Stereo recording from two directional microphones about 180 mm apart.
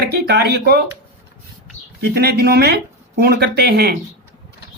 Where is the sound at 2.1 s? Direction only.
65° right (ahead or behind).